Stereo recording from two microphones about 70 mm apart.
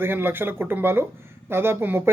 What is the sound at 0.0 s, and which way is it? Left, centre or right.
Speech, right.